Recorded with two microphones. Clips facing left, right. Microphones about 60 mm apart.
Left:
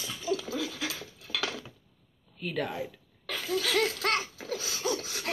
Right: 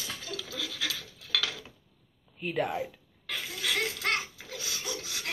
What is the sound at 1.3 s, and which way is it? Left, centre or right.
Dishes, left.